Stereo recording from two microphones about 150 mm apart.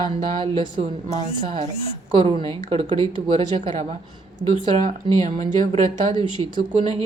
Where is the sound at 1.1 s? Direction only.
50° right (ahead or behind).